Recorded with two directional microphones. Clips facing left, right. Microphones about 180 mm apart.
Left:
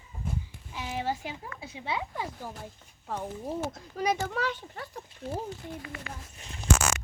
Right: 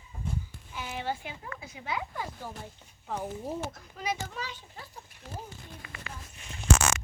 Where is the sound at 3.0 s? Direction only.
Centre (ahead or behind).